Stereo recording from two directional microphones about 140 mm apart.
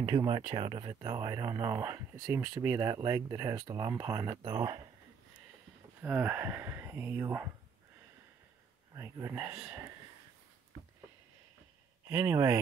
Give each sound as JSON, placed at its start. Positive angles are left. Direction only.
{"t": 0.0, "sound": "speech", "side_deg": -30}
{"t": 2.2, "sound": "speech", "side_deg": -10}
{"t": 6.0, "sound": "speech", "side_deg": -15}
{"t": 8.9, "sound": "speech", "side_deg": -20}
{"t": 12.1, "sound": "speech", "side_deg": -20}